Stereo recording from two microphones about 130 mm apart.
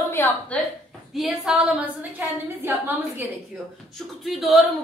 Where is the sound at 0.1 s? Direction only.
20° left (ahead or behind).